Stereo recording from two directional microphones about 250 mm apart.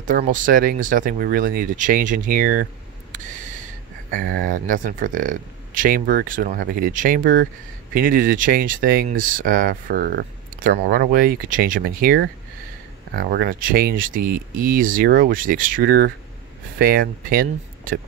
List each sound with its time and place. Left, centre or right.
0.0 s speech: right